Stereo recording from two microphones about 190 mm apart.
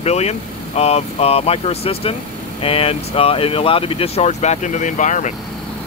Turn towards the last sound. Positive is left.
turn(degrees=40)  # may be behind; listen again after turning